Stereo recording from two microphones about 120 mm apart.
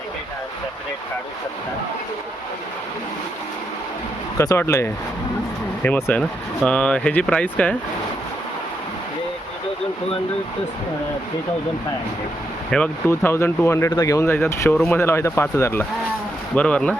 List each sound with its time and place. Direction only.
4.4 s speech: 20° left (ahead or behind)
12.7 s speech: 5° left (ahead or behind)
13.1 s speech: 20° left (ahead or behind)
16.6 s speech: 10° left (ahead or behind)